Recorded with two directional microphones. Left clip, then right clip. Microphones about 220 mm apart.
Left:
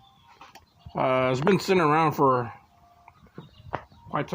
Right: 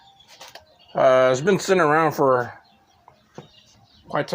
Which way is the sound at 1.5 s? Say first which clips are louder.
Right 4 dB; 15° left (ahead or behind).